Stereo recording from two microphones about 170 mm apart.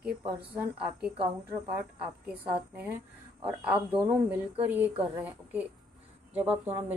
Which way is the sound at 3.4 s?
10° right (ahead or behind).